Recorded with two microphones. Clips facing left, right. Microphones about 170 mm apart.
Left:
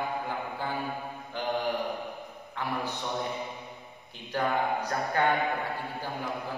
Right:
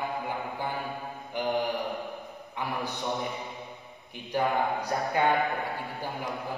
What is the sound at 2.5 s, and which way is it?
Speech, 15° right (ahead or behind).